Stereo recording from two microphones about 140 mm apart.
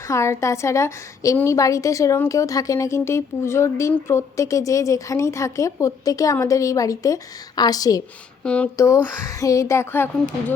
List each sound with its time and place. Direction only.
0.1 s a woman's voice: 20° left (ahead or behind)
8.4 s speech: 10° left (ahead or behind)
8.8 s a woman's voice: 20° left (ahead or behind)